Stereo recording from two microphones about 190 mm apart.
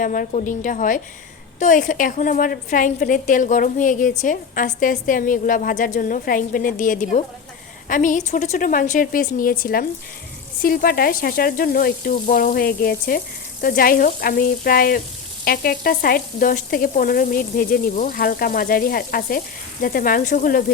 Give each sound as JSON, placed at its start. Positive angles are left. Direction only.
{"t": 0.0, "sound": "frying", "side_deg": 45}